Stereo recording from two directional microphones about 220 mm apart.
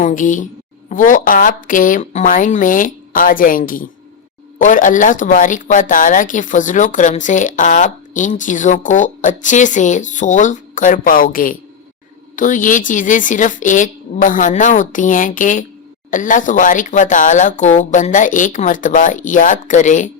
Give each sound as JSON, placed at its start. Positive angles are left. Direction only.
{"t": 0.0, "sound": "speech", "side_deg": 35}